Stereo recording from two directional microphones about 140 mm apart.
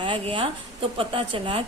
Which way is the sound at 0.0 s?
35° right (ahead or behind).